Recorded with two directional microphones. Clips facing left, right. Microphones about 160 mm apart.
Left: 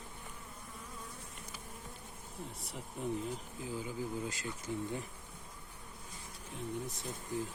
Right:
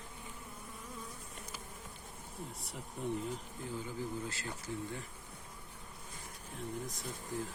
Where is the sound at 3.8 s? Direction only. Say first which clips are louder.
Left 2 dB; 15° left (ahead or behind).